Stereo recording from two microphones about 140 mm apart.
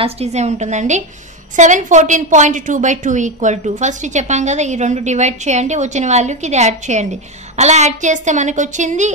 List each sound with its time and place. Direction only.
0.0 s a woman's voice: 50° right (ahead or behind)